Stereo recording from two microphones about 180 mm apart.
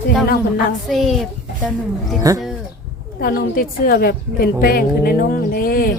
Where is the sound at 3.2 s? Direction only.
50° left (ahead or behind).